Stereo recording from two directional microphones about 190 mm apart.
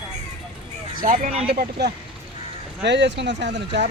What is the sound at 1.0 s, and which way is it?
Speech, 45° right (ahead or behind).